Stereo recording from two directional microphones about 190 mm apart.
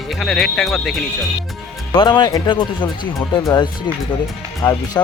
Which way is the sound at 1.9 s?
25° left (ahead or behind).